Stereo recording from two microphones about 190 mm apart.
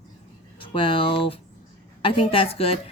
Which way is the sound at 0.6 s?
25° left (ahead or behind).